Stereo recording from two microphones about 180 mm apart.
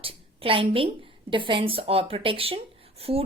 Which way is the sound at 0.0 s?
30° right (ahead or behind).